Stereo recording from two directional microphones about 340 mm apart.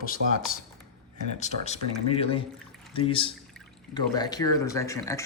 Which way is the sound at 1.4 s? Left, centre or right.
Centre.